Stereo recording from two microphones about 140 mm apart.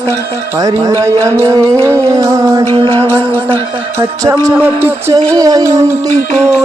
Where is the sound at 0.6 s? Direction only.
25° right (ahead or behind).